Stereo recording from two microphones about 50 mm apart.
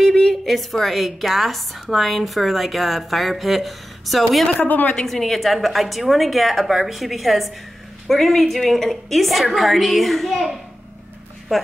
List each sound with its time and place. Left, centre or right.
0.0 s a sound: centre
0.5 s a woman's voice: centre
4.6 s a woman's voice: left
5.0 s a woman's voice: centre
11.5 s a woman's voice: centre